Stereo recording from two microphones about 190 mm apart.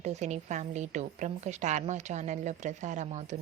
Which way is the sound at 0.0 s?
35° right (ahead or behind).